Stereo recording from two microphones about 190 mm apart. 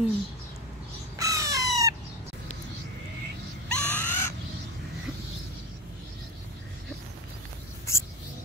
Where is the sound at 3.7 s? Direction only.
10° left (ahead or behind).